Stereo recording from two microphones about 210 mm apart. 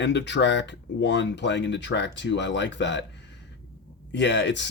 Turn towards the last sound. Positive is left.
turn(degrees=55)  # may be behind; listen again after turning